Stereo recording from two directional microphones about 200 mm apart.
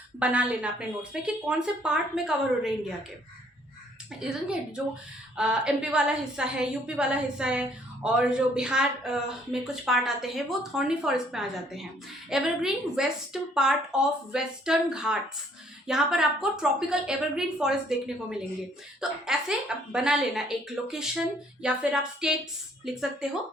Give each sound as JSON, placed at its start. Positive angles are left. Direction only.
{"t": 0.2, "sound": "a woman's voice", "side_deg": -5}
{"t": 4.2, "sound": "a woman's voice", "side_deg": -5}